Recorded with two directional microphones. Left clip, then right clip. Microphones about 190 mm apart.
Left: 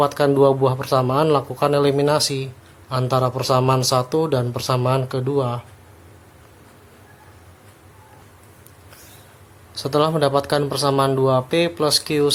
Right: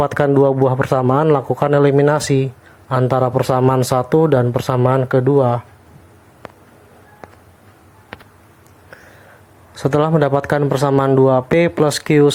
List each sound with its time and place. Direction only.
0.0 s speech: 30° right (ahead or behind)
9.9 s speech: 30° right (ahead or behind)